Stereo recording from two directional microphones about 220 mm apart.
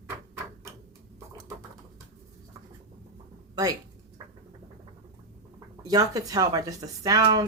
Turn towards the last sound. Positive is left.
turn(degrees=-15)  # may be behind; listen again after turning